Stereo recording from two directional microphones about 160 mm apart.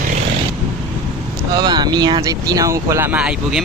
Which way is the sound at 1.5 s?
25° right (ahead or behind).